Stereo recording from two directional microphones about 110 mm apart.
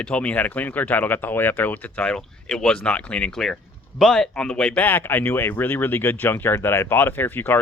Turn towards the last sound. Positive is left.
turn(degrees=20)  # may be behind; listen again after turning